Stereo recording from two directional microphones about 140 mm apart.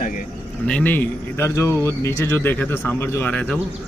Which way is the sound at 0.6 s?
10° left (ahead or behind).